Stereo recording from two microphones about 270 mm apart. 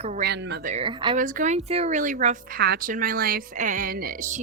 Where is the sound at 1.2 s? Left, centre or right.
Right.